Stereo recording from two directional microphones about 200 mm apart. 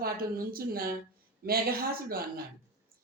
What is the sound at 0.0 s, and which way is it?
A woman's voice, 50° right (ahead or behind).